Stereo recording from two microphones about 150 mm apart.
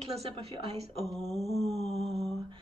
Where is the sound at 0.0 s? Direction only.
45° right (ahead or behind).